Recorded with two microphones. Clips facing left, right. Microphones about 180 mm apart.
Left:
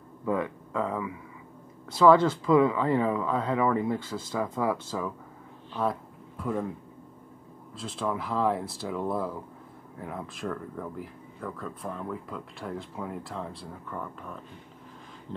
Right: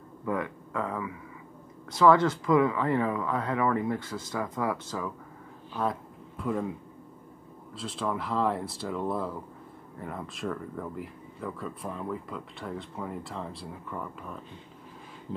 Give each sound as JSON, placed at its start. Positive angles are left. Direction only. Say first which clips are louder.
{"t": 0.2, "sound": "speech", "louder": "left 2 dB", "side_deg": 25}
{"t": 5.7, "sound": "a sound", "louder": "left 1 dB", "side_deg": 0}
{"t": 7.7, "sound": "speech", "louder": "left 1 dB", "side_deg": 0}